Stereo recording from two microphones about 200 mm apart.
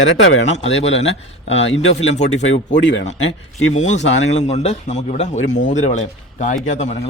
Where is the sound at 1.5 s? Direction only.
70° left (ahead or behind).